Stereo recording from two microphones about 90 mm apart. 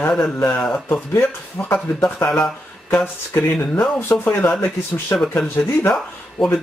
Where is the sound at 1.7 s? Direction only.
25° left (ahead or behind).